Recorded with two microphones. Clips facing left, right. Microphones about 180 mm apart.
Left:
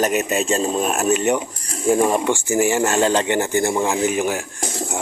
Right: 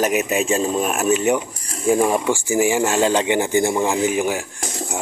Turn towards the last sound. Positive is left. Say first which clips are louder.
# left 1 dB
turn(degrees=-10)  # may be behind; listen again after turning